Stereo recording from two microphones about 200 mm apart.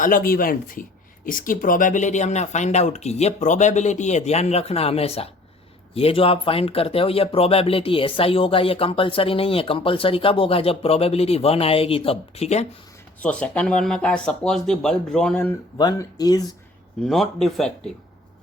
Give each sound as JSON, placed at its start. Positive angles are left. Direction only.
{"t": 0.0, "sound": "speech", "side_deg": 45}
{"t": 13.2, "sound": "speech", "side_deg": 5}
{"t": 15.8, "sound": "speech", "side_deg": 20}
{"t": 17.1, "sound": "speech", "side_deg": 0}